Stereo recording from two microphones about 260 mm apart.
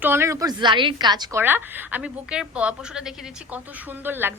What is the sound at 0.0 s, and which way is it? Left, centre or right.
A woman's voice, centre.